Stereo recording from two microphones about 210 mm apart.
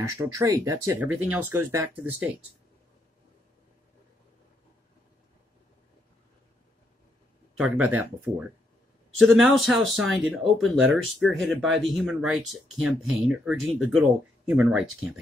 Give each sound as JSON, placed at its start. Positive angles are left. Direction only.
{"t": 0.2, "sound": "speech", "side_deg": -15}
{"t": 7.5, "sound": "speech", "side_deg": -5}
{"t": 9.2, "sound": "speech", "side_deg": 0}